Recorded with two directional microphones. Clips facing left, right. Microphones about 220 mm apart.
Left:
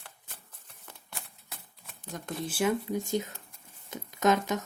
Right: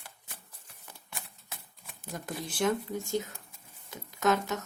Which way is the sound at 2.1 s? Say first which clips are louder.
Left 2 dB; 5° right (ahead or behind).